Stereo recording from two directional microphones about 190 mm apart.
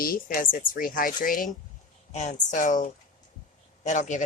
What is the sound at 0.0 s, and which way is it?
Speech, 50° left (ahead or behind).